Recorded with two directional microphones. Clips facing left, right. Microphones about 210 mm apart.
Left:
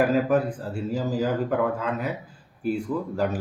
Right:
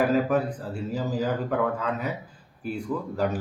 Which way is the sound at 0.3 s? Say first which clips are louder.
Left 2 dB; 5° left (ahead or behind).